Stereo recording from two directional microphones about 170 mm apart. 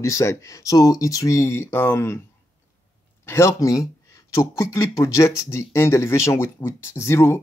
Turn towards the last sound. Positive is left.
turn(degrees=15)  # may be behind; listen again after turning